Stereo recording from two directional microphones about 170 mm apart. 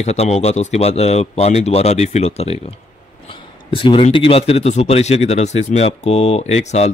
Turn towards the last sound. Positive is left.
turn(degrees=40)  # may be behind; listen again after turning